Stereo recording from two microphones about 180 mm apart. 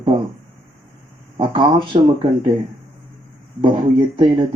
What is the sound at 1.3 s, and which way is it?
Speech, 25° right (ahead or behind).